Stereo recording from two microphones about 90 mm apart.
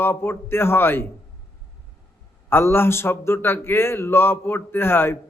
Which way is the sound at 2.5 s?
25° left (ahead or behind).